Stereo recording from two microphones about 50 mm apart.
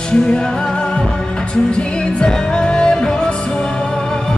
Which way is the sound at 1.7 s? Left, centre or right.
Centre.